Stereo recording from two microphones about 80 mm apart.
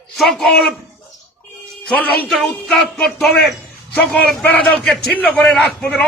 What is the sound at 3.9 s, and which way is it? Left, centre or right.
A man's voice, centre.